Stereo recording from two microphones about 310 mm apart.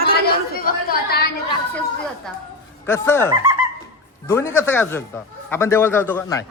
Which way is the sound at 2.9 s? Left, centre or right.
Centre.